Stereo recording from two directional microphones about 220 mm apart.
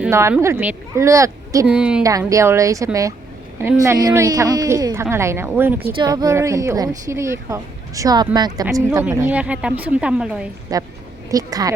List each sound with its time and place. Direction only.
0.0 s a woman's voice: 10° right (ahead or behind)
2.0 s a woman's voice: 15° right (ahead or behind)
10.7 s a woman's voice: 15° right (ahead or behind)